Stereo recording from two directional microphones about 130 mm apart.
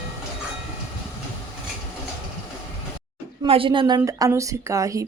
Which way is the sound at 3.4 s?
45° right (ahead or behind).